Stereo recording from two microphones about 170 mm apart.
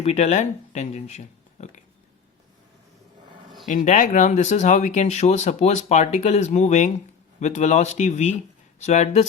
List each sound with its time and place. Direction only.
0.0 s speech: 40° left (ahead or behind)
3.7 s speech: 50° left (ahead or behind)